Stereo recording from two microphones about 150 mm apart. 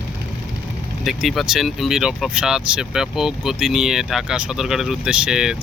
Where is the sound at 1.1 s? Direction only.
Centre (ahead or behind).